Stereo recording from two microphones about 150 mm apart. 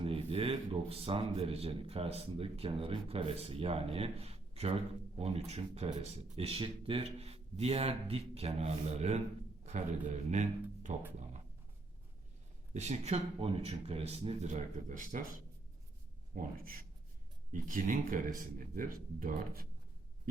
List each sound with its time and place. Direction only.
0.0 s a man's voice: 40° right (ahead or behind)
10.9 s speech: 55° right (ahead or behind)
12.7 s speech: 50° right (ahead or behind)
16.3 s speech: 65° right (ahead or behind)
17.5 s speech: 65° right (ahead or behind)